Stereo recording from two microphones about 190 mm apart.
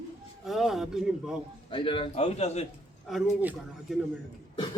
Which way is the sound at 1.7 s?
30° left (ahead or behind).